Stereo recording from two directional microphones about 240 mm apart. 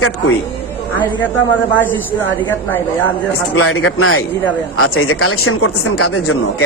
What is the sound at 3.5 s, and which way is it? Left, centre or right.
Speech, left.